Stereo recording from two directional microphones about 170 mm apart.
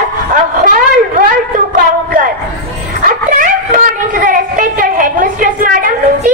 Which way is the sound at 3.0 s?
55° right (ahead or behind).